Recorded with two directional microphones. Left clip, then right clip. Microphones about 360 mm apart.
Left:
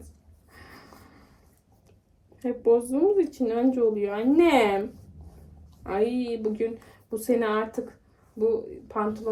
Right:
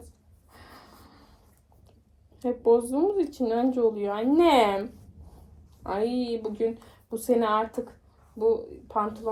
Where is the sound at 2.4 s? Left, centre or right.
Centre.